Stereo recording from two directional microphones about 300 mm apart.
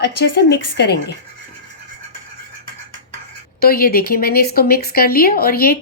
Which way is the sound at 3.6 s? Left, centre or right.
Left.